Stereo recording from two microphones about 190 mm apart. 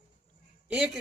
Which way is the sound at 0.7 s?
5° right (ahead or behind).